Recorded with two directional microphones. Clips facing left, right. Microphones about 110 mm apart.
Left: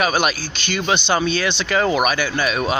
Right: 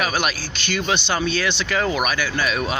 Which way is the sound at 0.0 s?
15° left (ahead or behind).